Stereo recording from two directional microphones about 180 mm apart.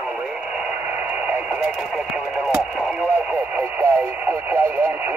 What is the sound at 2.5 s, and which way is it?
Speech, 10° right (ahead or behind).